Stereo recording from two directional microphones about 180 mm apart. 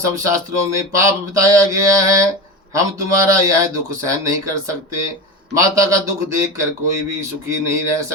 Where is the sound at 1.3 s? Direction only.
15° right (ahead or behind).